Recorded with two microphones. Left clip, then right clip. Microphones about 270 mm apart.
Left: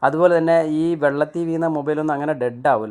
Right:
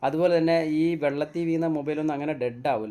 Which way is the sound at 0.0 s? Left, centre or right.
Centre.